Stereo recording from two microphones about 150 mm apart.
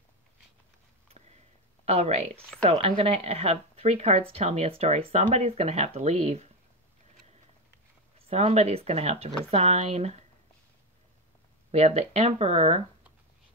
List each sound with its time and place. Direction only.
1.9 s speech: 45° right (ahead or behind)
8.3 s speech: 45° right (ahead or behind)
11.7 s speech: 45° right (ahead or behind)